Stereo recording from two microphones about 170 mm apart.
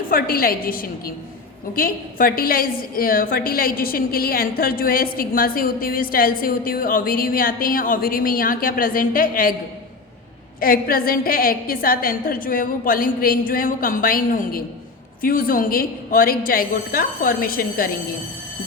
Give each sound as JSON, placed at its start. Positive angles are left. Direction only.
{"t": 0.1, "sound": "a woman's voice", "side_deg": 60}
{"t": 10.6, "sound": "a woman's voice", "side_deg": 60}